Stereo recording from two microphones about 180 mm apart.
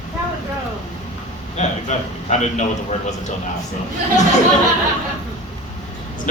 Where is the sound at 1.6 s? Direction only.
40° left (ahead or behind).